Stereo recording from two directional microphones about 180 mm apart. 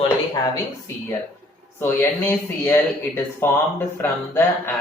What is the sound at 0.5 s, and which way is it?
Speech, 15° left (ahead or behind).